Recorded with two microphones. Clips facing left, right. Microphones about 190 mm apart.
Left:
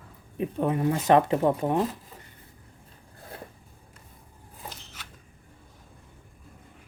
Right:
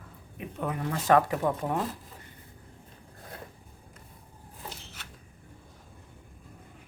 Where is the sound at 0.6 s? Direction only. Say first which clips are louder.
Left 6 dB; 25° left (ahead or behind).